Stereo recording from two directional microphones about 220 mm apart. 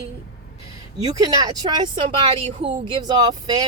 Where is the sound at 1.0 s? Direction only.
15° right (ahead or behind).